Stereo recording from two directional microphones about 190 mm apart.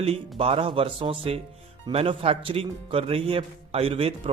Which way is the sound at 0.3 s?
30° right (ahead or behind).